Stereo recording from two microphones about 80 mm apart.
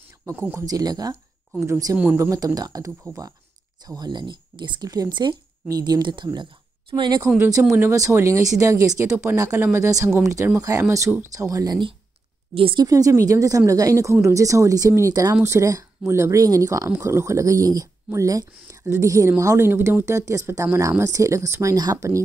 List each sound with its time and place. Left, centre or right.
0.3 s a woman's voice: right
0.7 s speech: right
3.8 s speech: right
4.8 s speech: right
7.6 s speech: right
7.9 s a woman's voice: right
12.8 s a woman's voice: right